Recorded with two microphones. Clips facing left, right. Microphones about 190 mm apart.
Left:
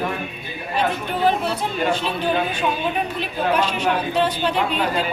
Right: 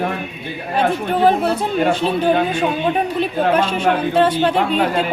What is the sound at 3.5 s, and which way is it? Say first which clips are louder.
Speech: right 2 dB; 50° right (ahead or behind).